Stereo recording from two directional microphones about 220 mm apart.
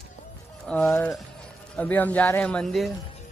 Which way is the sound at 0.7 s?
5° left (ahead or behind).